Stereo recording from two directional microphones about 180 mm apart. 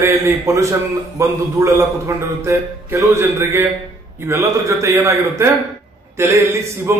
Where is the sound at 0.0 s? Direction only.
15° right (ahead or behind).